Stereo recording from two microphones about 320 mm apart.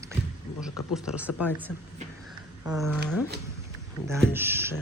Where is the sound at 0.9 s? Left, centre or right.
Centre.